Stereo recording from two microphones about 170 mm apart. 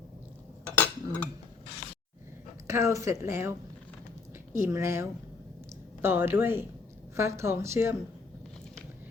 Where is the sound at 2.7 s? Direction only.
15° right (ahead or behind).